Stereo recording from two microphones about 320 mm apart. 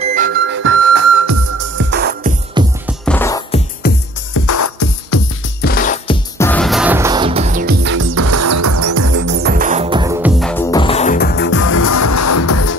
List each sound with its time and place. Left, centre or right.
0.0 s music: right
0.5 s music: right
1.9 s music: right
2.6 s music: centre
2.9 s music: centre
3.8 s music: left
4.3 s music: left
5.6 s music: left
6.3 s music: centre; by 9.1 s right
9.1 s music: right; by 10.3 s centre
10.4 s music: centre; by 11.6 s left
11.6 s music: left